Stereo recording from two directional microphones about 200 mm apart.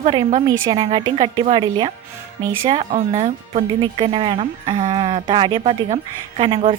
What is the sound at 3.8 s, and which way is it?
Speech, 25° right (ahead or behind).